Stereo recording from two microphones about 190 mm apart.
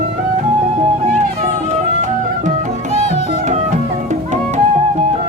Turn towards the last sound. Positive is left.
turn(degrees=-40)  # may be behind; listen again after turning